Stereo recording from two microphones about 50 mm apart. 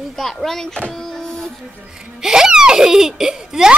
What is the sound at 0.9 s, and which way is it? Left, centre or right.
Printer, centre.